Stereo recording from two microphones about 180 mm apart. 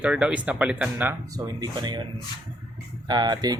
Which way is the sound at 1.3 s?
20° right (ahead or behind).